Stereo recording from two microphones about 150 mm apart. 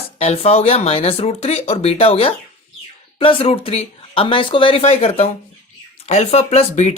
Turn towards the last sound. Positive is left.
turn(degrees=45)  # may be behind; listen again after turning